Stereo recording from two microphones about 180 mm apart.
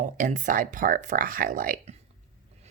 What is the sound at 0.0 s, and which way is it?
Speech, 45° right (ahead or behind).